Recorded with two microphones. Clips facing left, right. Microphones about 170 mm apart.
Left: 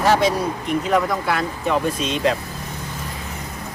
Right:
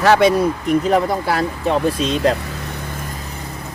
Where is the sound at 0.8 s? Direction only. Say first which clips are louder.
Right 3 dB; 30° right (ahead or behind).